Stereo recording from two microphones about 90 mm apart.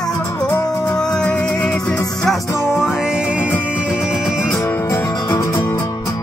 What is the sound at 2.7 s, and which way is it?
Music, 10° right (ahead or behind).